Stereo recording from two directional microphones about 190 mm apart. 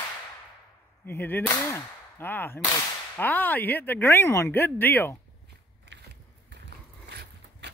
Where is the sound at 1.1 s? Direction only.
10° left (ahead or behind).